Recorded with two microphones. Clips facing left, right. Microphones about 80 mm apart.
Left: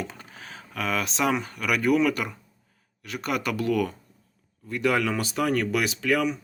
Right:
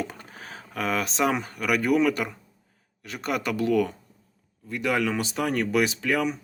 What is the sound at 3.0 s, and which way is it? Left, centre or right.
Speech, right.